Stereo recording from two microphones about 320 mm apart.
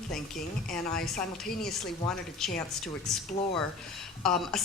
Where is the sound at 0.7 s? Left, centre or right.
Centre.